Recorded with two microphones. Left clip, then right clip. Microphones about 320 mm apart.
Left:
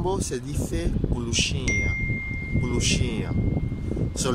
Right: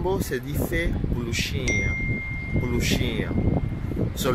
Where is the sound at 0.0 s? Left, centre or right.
Centre.